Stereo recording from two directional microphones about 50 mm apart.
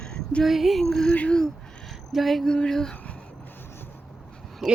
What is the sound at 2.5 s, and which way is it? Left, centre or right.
Speech, centre.